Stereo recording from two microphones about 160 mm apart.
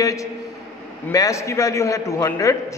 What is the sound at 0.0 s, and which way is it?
A man's voice, 20° left (ahead or behind).